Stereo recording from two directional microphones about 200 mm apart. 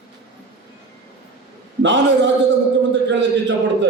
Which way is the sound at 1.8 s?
65° right (ahead or behind).